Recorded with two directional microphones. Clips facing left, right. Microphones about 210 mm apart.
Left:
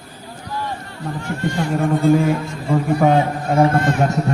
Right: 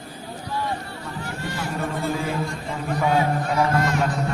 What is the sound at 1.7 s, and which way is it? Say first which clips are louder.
Speech: left 12 dB; 50° left (ahead or behind).